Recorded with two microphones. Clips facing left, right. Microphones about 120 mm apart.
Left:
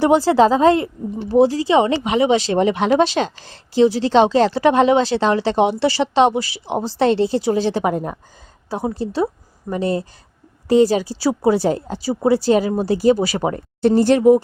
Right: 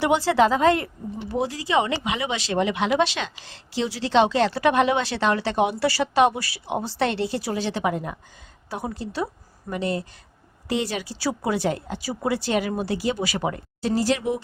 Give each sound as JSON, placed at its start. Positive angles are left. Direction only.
{"t": 0.0, "sound": "a woman's voice", "side_deg": 35}
{"t": 13.8, "sound": "speech", "side_deg": 55}